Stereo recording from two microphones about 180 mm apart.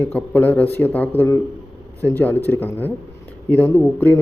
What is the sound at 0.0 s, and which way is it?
A man's voice, 10° left (ahead or behind).